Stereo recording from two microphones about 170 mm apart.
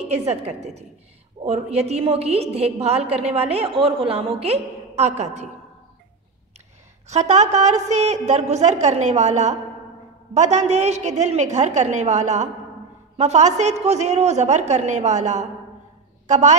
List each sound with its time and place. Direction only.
0.3 s a woman's voice: 40° right (ahead or behind)
7.1 s a woman's voice: 40° right (ahead or behind)